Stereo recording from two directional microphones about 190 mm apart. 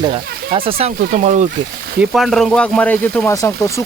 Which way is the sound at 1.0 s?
45° right (ahead or behind).